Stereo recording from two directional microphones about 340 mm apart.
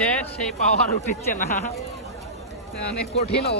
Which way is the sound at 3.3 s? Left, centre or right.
Left.